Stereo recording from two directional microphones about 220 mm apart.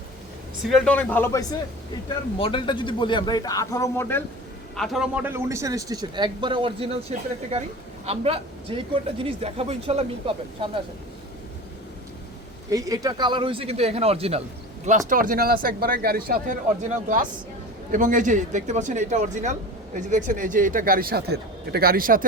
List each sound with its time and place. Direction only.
0.6 s a man's voice: centre (ahead or behind)
4.8 s speech: centre (ahead or behind); by 6.9 s 25° right (ahead or behind)
8.0 s speech: 25° right (ahead or behind)
12.7 s a man's voice: 15° right (ahead or behind); by 16.6 s 40° right (ahead or behind)
17.9 s a man's voice: 35° right (ahead or behind)